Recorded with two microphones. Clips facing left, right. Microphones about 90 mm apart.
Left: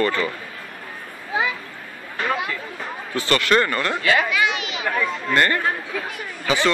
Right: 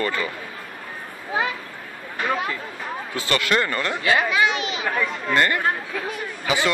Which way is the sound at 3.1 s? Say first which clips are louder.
Left 4 dB; 20° right (ahead or behind).